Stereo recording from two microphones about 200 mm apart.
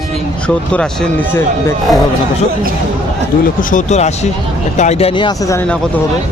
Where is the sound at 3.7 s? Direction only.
35° left (ahead or behind); by 5.6 s 15° left (ahead or behind).